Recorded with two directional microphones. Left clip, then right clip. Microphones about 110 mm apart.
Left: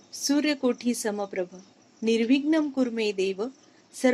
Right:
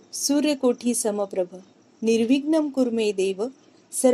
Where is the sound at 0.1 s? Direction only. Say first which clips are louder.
Right 3 dB; 15° right (ahead or behind).